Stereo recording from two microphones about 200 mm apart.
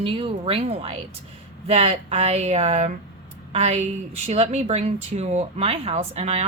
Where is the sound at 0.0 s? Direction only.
30° right (ahead or behind).